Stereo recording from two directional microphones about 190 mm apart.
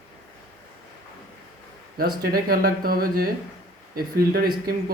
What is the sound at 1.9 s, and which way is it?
A man's voice, 55° right (ahead or behind).